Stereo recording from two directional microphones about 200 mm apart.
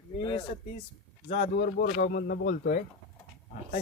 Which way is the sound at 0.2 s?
25° left (ahead or behind).